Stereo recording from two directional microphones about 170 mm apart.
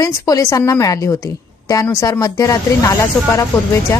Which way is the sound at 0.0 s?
20° left (ahead or behind).